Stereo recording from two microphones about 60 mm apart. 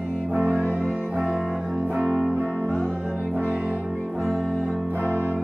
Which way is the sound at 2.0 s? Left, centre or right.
Centre.